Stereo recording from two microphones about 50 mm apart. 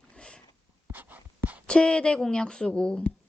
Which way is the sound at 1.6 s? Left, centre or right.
Centre.